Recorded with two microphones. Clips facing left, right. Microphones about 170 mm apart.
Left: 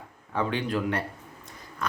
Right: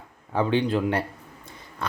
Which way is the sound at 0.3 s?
30° right (ahead or behind).